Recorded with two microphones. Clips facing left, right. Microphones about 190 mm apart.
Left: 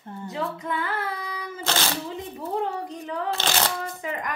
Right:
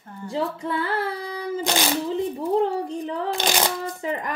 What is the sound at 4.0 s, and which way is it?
Speech, 30° right (ahead or behind).